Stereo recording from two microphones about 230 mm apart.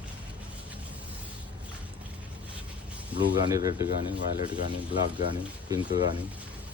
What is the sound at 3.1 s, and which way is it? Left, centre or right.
Speech, centre.